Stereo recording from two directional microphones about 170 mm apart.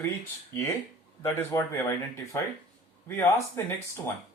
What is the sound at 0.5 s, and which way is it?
Speech, 15° left (ahead or behind).